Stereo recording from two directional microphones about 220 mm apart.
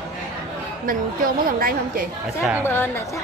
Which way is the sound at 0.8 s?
40° right (ahead or behind).